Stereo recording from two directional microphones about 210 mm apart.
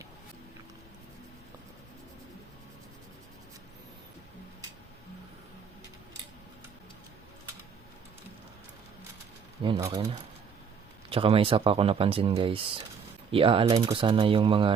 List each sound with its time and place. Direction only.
9.6 s speech: 15° right (ahead or behind)
11.1 s speech: 25° right (ahead or behind)